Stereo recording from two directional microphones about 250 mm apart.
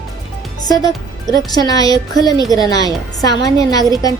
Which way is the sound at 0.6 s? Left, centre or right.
Centre.